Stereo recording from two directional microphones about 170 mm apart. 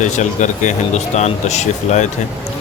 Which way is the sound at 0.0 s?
45° left (ahead or behind).